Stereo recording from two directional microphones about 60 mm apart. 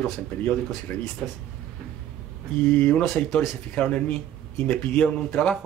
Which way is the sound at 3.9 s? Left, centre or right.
Centre.